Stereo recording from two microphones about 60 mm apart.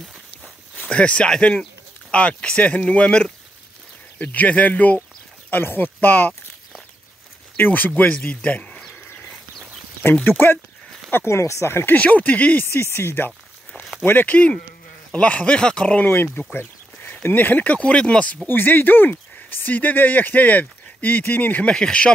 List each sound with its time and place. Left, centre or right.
0.7 s speech: left
4.2 s speech: left
5.5 s speech: left
7.5 s a man's voice: left
10.2 s speech: left
11.2 s speech: left
12.0 s speech: left
12.6 s speech: left; by 16.1 s centre
16.1 s speech: left
18.5 s speech: left
21.6 s speech: centre